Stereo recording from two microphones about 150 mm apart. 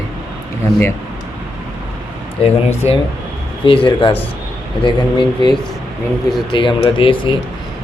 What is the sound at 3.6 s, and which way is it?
Speech, 35° left (ahead or behind).